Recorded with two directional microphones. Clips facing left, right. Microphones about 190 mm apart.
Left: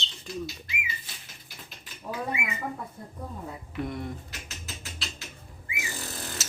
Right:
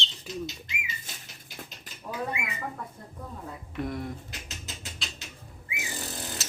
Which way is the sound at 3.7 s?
Centre (ahead or behind).